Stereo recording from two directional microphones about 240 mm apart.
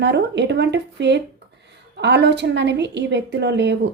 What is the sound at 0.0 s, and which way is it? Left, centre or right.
A woman's voice, right.